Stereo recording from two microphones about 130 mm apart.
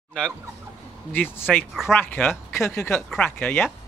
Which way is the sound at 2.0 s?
15° left (ahead or behind).